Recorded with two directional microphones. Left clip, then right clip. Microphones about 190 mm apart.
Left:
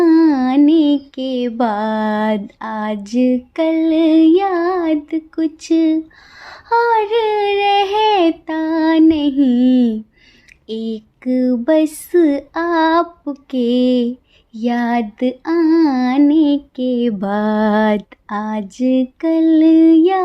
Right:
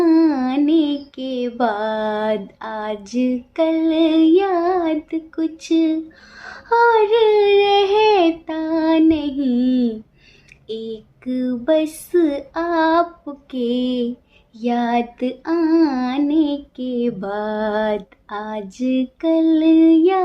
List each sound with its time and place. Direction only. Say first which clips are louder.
0.0 s music: left 3 dB; 45° left (ahead or behind)
6.4 s female singing: even; 45° left (ahead or behind)